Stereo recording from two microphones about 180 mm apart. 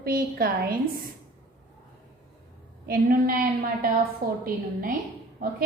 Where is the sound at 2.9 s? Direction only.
50° right (ahead or behind).